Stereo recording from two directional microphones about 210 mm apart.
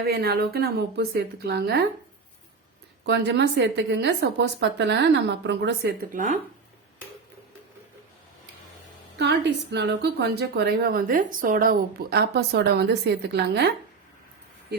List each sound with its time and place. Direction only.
0.0 s a woman's voice: 45° right (ahead or behind)
3.0 s a woman's voice: 55° right (ahead or behind); by 6.4 s 40° right (ahead or behind)
9.1 s a woman's voice: 55° right (ahead or behind)